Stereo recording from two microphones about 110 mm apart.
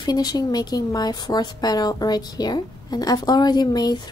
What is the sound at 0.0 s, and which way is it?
Speech, 35° left (ahead or behind).